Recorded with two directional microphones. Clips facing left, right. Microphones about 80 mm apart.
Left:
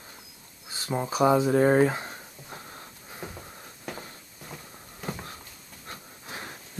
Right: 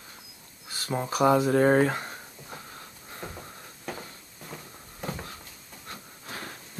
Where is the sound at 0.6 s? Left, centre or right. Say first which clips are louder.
Even; left.